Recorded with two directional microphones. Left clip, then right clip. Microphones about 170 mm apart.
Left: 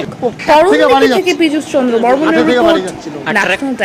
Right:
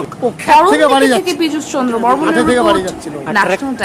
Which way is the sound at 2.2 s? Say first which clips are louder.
Left 2 dB; 20° right (ahead or behind).